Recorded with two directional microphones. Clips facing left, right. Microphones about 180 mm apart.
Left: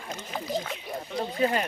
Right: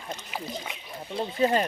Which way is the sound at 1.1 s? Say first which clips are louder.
Right 2 dB; 30° right (ahead or behind).